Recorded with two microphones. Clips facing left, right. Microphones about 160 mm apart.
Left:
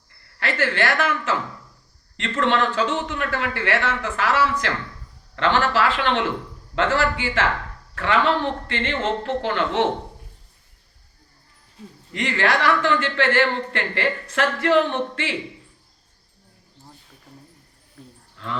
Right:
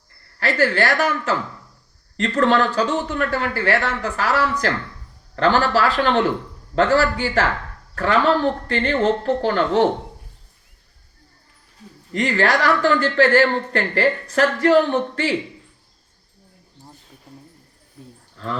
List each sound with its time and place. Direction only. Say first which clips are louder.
0.3 s speech: right 4 dB; 40° right (ahead or behind)
12.1 s speech: right 3 dB; 40° right (ahead or behind)
18.0 s a sound: right 3 dB; 20° right (ahead or behind)